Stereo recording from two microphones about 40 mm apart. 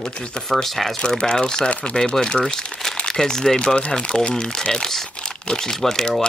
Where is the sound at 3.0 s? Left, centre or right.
Centre.